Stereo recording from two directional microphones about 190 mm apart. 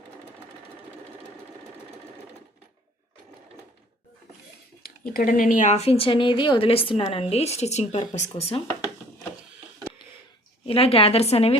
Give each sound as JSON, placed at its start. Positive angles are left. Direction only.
{"t": 5.1, "sound": "a woman's voice", "side_deg": 45}
{"t": 10.7, "sound": "a woman's voice", "side_deg": 30}